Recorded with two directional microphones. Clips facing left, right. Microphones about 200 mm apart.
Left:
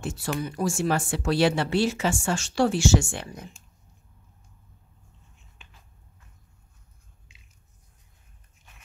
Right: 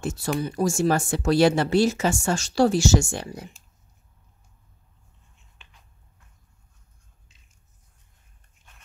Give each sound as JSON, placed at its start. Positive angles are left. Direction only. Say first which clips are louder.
{"t": 0.0, "sound": "speech", "louder": "right 3 dB", "side_deg": -40}